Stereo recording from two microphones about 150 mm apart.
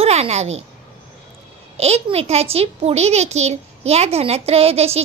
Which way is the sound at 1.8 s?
45° right (ahead or behind).